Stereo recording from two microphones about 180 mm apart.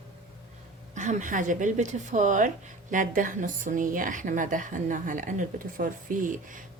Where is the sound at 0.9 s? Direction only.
45° right (ahead or behind).